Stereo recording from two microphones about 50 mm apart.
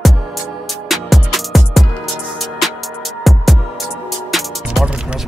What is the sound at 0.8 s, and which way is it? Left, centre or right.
Music, centre.